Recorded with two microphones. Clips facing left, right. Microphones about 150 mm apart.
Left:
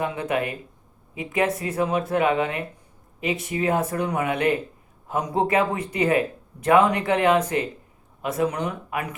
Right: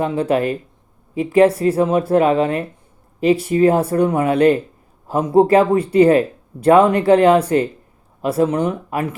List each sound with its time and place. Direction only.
0.0 s speech: 30° right (ahead or behind)